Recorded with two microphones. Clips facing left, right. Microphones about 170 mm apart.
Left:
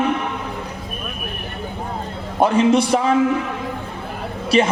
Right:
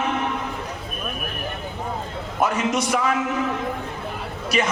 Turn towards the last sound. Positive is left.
turn(degrees=30)  # may be behind; listen again after turning